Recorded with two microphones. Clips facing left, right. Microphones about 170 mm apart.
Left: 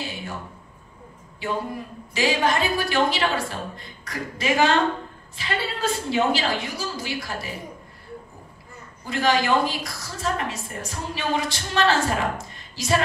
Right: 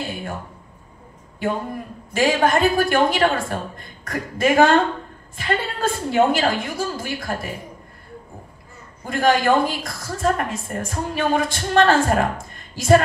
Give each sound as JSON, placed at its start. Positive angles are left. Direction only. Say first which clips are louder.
{"t": 1.4, "sound": "a woman's voice", "louder": "right 3 dB", "side_deg": -50}
{"t": 9.0, "sound": "a woman's voice", "louder": "right 4 dB", "side_deg": -50}